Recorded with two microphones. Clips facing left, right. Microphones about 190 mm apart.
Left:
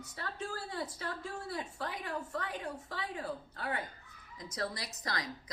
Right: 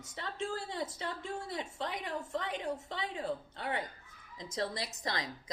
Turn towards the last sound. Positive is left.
turn(degrees=-25)  # may be behind; listen again after turning